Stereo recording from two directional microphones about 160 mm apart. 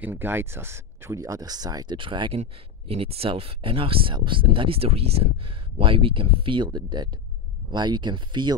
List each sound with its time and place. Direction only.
0.0 s speech: 15° right (ahead or behind)